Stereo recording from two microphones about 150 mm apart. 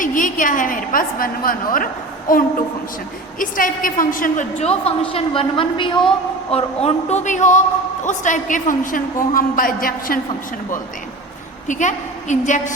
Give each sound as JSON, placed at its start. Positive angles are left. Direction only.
{"t": 0.0, "sound": "a woman's voice", "side_deg": 60}
{"t": 4.6, "sound": "a woman's voice", "side_deg": 40}
{"t": 11.7, "sound": "a woman's voice", "side_deg": 55}